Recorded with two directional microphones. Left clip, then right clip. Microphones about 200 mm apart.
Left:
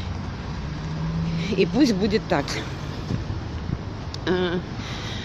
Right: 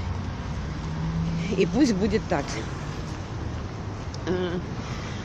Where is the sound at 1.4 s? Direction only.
5° left (ahead or behind).